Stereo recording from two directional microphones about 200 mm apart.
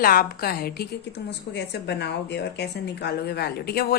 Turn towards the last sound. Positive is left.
turn(degrees=55)  # may be behind; listen again after turning